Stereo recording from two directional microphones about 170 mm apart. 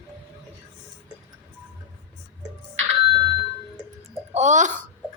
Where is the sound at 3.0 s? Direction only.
30° right (ahead or behind).